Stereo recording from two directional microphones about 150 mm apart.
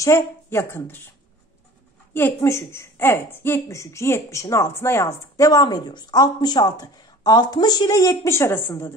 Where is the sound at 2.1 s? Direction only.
15° left (ahead or behind).